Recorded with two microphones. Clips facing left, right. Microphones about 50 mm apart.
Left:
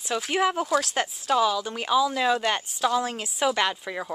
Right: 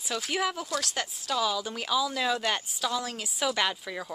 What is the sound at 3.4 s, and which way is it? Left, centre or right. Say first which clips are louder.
Speech: left 4 dB; centre.